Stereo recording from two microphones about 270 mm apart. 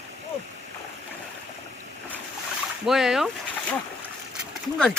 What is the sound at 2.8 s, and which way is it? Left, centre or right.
Speech, centre.